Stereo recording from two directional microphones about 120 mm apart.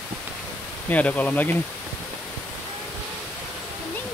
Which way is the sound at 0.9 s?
10° left (ahead or behind).